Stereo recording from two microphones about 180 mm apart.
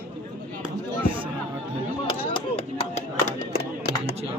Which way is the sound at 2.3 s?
30° left (ahead or behind).